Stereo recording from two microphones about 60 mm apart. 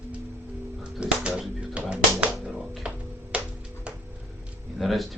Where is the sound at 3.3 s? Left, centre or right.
Right.